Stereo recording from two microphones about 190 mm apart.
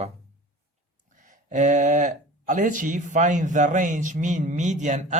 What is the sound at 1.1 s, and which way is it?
Speech, 40° right (ahead or behind).